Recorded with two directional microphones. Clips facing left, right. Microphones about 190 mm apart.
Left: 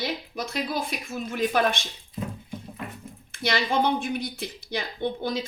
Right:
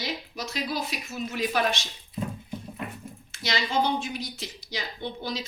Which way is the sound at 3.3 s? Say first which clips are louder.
Left 5 dB; 55° left (ahead or behind).